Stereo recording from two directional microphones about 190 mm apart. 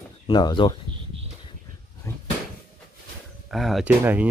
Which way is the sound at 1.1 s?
30° right (ahead or behind).